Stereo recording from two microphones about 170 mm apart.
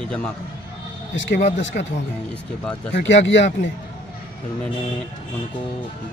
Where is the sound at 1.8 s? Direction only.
70° left (ahead or behind).